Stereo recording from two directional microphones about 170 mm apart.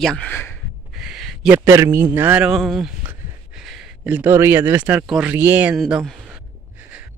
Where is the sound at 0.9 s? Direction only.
Centre (ahead or behind).